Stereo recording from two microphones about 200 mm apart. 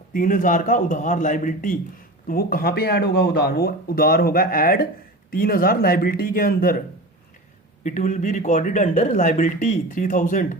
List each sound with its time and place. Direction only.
0.1 s speech: 40° left (ahead or behind)
7.9 s speech: 40° left (ahead or behind)